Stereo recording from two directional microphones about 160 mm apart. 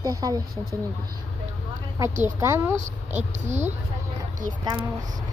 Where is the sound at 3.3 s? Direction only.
45° right (ahead or behind).